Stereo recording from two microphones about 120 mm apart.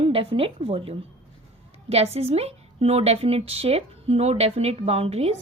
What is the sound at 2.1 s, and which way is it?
A woman's voice, 60° right (ahead or behind).